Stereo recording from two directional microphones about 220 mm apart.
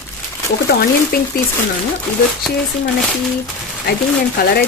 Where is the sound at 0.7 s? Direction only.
45° left (ahead or behind).